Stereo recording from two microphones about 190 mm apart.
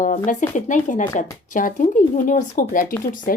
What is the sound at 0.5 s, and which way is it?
A woman's voice, 40° left (ahead or behind).